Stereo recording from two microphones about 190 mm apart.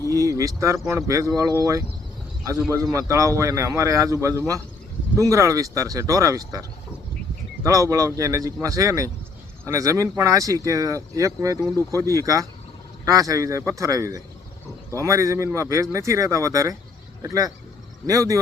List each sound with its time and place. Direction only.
0.1 s speech: 15° right (ahead or behind)
2.9 s speech: 15° right (ahead or behind)